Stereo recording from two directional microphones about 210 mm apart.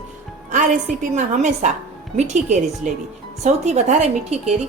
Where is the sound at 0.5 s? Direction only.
35° right (ahead or behind).